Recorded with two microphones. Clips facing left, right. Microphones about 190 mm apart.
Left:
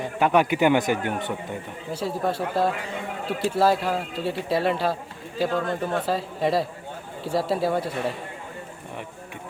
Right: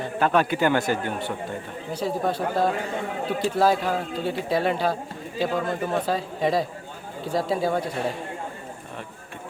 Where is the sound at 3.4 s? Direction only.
5° left (ahead or behind).